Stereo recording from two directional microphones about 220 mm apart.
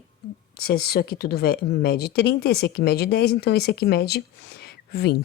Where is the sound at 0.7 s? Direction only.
45° left (ahead or behind).